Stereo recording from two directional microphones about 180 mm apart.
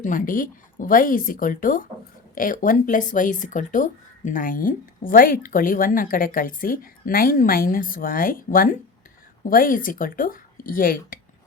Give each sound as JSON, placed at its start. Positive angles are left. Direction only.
{"t": 0.0, "sound": "speech", "side_deg": 50}